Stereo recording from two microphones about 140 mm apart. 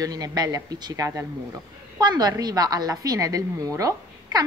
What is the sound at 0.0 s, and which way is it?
A woman's voice, 25° right (ahead or behind).